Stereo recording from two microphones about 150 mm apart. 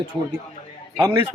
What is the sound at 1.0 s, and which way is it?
Speech, 20° right (ahead or behind).